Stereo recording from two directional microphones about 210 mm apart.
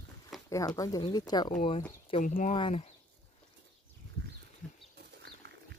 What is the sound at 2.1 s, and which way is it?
Speech, 35° left (ahead or behind).